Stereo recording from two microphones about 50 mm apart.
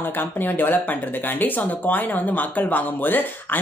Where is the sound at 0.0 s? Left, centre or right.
Left.